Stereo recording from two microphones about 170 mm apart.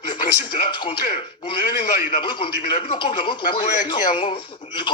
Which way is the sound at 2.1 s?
30° left (ahead or behind).